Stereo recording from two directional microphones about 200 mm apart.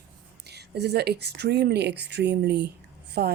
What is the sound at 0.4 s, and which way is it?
Speech, 55° right (ahead or behind).